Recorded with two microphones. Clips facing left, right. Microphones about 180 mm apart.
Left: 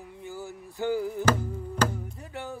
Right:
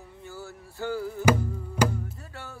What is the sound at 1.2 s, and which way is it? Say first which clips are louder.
Music: right 2 dB; 10° right (ahead or behind).